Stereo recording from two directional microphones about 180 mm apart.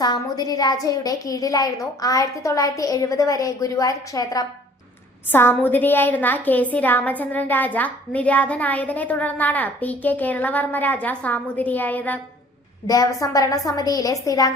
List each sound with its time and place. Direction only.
0.0 s a woman's voice: 20° left (ahead or behind)
12.9 s a woman's voice: 20° left (ahead or behind)